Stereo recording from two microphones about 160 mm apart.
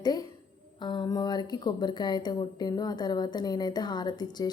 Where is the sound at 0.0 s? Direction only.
25° left (ahead or behind).